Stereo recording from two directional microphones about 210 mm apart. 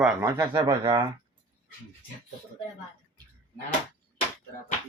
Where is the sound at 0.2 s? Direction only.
15° right (ahead or behind).